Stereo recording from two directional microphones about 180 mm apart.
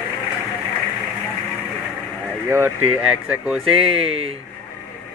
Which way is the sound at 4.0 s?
30° right (ahead or behind).